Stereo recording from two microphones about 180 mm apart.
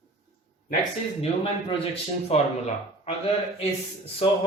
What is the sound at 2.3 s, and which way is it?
Speech, 35° left (ahead or behind).